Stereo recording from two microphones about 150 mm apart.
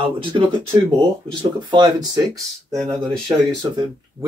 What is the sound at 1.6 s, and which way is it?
Speech, 30° right (ahead or behind).